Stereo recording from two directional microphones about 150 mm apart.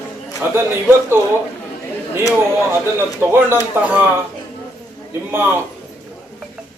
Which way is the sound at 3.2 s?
15° right (ahead or behind).